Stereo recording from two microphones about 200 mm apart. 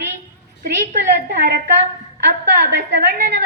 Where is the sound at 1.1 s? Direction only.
55° right (ahead or behind).